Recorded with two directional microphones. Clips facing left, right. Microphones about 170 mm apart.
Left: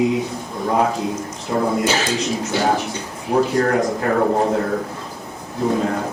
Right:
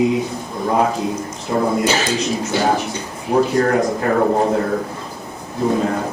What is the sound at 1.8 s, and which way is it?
A man's voice, 15° right (ahead or behind).